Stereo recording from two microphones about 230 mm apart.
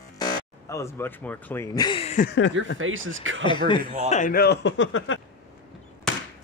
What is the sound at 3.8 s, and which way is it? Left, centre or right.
Speech, right.